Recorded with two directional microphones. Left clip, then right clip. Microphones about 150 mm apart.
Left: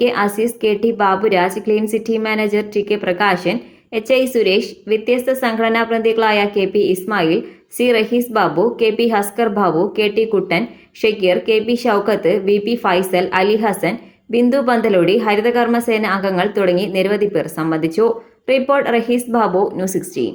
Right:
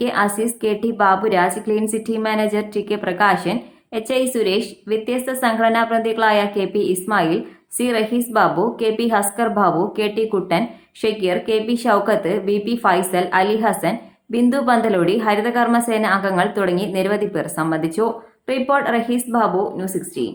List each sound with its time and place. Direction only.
0.0 s speech: 15° left (ahead or behind)
19.7 s a woman's voice: 40° left (ahead or behind)